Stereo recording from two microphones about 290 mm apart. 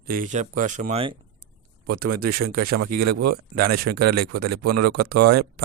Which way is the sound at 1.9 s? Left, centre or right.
Right.